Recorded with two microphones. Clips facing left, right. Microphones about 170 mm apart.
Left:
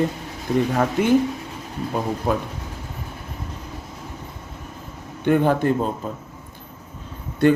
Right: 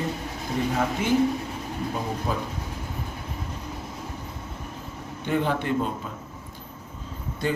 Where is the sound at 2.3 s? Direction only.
70° left (ahead or behind).